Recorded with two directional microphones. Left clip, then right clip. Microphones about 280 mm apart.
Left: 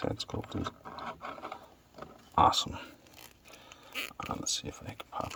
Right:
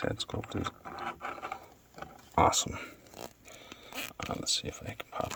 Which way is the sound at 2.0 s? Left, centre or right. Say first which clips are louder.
Left 1 dB; right.